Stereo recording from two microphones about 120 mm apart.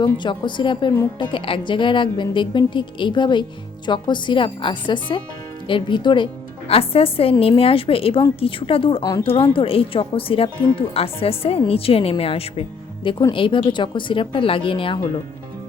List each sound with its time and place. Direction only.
0.0 s a woman's voice: 40° left (ahead or behind)
6.7 s a woman's voice: 55° left (ahead or behind)